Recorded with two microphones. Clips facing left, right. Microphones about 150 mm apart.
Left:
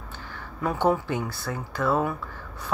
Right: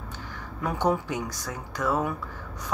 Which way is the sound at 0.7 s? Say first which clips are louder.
Left 2 dB; 15° right (ahead or behind).